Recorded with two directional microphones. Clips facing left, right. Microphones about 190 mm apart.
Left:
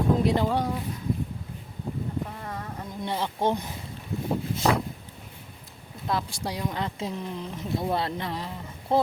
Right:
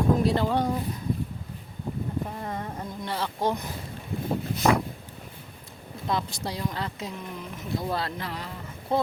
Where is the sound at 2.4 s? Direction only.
25° right (ahead or behind).